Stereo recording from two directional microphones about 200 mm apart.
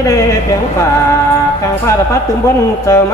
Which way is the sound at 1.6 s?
15° left (ahead or behind).